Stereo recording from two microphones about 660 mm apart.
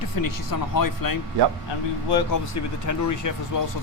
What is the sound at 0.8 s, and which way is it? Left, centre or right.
Speech, left.